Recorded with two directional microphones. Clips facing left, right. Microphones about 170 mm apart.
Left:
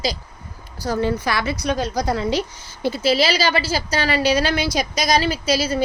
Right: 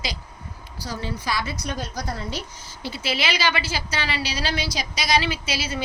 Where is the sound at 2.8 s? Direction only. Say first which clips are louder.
Left 9 dB; 40° left (ahead or behind).